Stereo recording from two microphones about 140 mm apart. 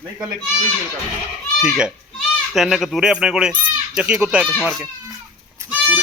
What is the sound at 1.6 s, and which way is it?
Speech, 5° right (ahead or behind).